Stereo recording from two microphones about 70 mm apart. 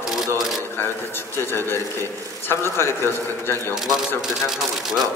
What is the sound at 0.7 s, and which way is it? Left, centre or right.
A man's voice, left.